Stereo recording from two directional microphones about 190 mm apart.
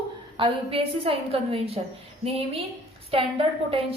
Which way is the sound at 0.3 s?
30° right (ahead or behind).